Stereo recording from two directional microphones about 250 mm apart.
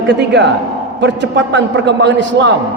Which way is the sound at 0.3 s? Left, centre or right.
Right.